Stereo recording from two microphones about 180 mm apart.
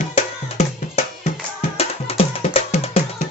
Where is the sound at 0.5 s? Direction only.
40° left (ahead or behind).